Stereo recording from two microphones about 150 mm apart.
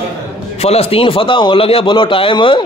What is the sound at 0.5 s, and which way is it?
A man's voice, 45° left (ahead or behind).